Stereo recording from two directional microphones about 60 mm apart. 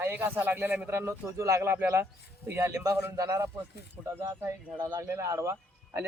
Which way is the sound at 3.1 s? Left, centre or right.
Right.